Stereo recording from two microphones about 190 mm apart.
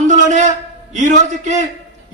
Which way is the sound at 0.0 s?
40° right (ahead or behind).